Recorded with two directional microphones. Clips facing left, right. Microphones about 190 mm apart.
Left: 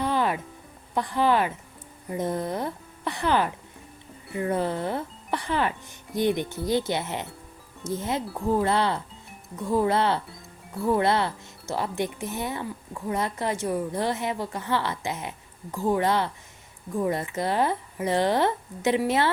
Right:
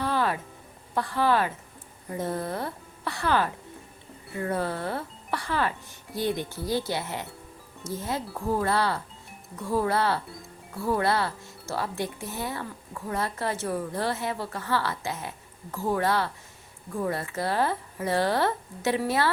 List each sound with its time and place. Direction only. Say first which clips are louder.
0.0 s music: left 2 dB; 15° left (ahead or behind)
0.9 s speech: left 2 dB; 20° left (ahead or behind)
8.6 s speech: left 2 dB; 20° left (ahead or behind)